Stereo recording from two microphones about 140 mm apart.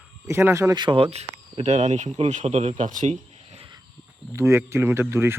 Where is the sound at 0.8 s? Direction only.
40° right (ahead or behind); by 3.2 s 60° right (ahead or behind).